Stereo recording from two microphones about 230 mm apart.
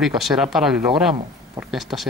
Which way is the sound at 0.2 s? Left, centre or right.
Centre.